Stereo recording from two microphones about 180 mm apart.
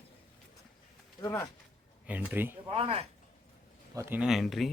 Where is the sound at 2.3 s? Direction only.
10° right (ahead or behind).